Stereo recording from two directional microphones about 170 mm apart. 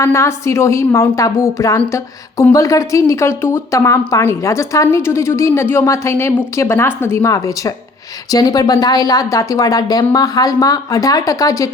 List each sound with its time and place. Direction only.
0.0 s speech: 15° left (ahead or behind)